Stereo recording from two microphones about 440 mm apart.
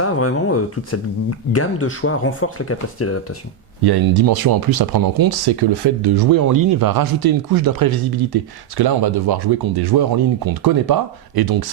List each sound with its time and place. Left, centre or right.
0.0 s speech: left
3.8 s speech: right